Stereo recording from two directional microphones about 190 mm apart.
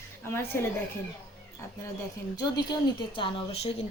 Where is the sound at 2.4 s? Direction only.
25° left (ahead or behind).